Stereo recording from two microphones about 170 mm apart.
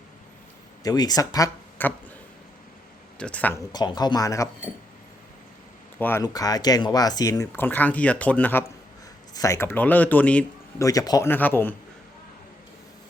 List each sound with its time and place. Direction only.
0.8 s speech: 20° left (ahead or behind)
3.2 s speech: 5° left (ahead or behind)
3.7 s speech: 25° left (ahead or behind)
6.0 s speech: 10° left (ahead or behind)
10.8 s speech: 20° left (ahead or behind)
11.3 s speech: 10° left (ahead or behind)